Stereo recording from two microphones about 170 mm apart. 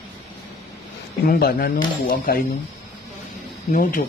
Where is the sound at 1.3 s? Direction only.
60° left (ahead or behind).